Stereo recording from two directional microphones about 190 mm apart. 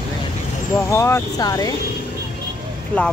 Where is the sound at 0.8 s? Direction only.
15° left (ahead or behind).